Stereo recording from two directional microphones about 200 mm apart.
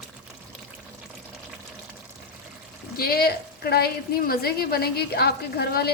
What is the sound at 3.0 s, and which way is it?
A woman's voice, 50° left (ahead or behind).